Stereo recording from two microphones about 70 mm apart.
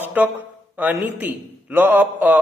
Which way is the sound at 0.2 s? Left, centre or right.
Right.